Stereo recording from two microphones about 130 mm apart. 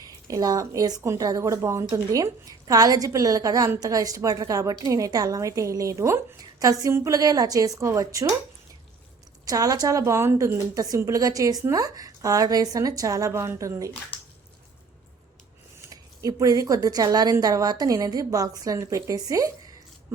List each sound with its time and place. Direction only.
0.0 s speech: 25° right (ahead or behind)
9.5 s speech: 30° right (ahead or behind)
15.8 s speech: 25° right (ahead or behind)